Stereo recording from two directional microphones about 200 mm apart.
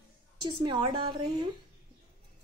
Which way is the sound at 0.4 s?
25° right (ahead or behind).